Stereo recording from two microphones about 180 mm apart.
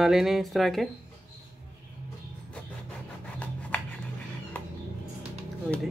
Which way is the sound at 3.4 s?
10° left (ahead or behind).